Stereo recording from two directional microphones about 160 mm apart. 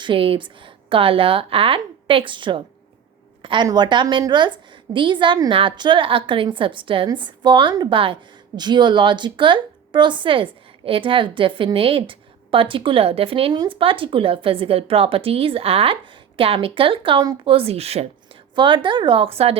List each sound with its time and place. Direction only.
0.0 s a woman's voice: 35° right (ahead or behind)